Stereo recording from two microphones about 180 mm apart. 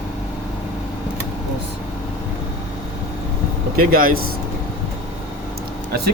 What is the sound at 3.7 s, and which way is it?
Speech, 55° right (ahead or behind).